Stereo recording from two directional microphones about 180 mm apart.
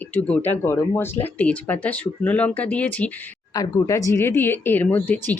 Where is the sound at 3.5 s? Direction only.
20° left (ahead or behind).